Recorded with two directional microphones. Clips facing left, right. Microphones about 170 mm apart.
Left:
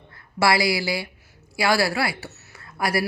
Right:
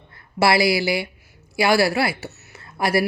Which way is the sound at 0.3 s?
25° right (ahead or behind).